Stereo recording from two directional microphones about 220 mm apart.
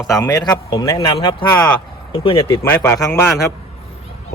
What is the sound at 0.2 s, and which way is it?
A man's voice, 15° left (ahead or behind).